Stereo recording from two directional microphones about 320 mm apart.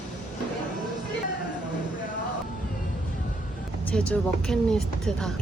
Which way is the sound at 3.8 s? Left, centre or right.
Centre.